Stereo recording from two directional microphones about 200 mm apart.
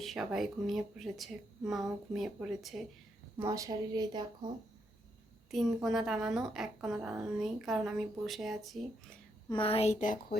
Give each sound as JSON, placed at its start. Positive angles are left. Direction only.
{"t": 0.0, "sound": "speech", "side_deg": 0}
{"t": 3.3, "sound": "a woman's voice", "side_deg": -15}
{"t": 5.5, "sound": "speech", "side_deg": 0}
{"t": 9.5, "sound": "speech", "side_deg": 25}